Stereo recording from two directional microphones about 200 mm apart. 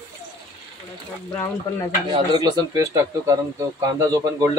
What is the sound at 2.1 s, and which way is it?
A man's voice, 20° right (ahead or behind).